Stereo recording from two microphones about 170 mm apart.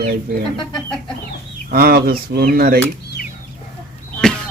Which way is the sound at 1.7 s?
65° right (ahead or behind).